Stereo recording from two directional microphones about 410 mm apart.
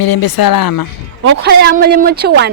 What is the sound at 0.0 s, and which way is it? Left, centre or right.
Speech, left.